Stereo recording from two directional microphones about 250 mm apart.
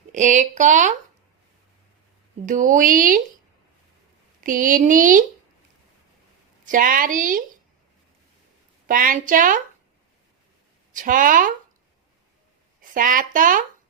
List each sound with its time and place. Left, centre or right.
0.1 s speech: right
2.5 s speech: right
4.4 s speech: right
6.7 s speech: right
8.9 s speech: right
10.9 s speech: right
12.9 s speech: right